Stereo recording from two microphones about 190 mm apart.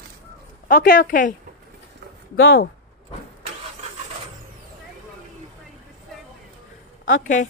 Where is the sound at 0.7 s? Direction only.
45° left (ahead or behind).